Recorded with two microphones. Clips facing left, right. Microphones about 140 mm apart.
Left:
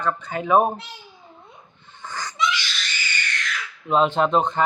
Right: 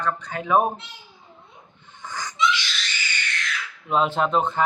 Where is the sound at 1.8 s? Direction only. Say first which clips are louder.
Left 1 dB; 15° right (ahead or behind).